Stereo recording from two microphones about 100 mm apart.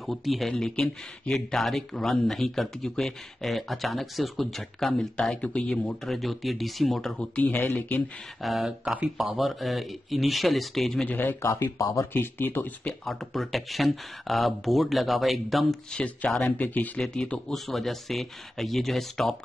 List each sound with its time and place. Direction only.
0.0 s speech: centre (ahead or behind)
7.2 s speech: 10° left (ahead or behind)
8.4 s speech: centre (ahead or behind)
11.1 s speech: 20° left (ahead or behind)
11.8 s speech: 35° left (ahead or behind)
12.1 s speech: 20° left (ahead or behind)
13.0 s speech: centre (ahead or behind)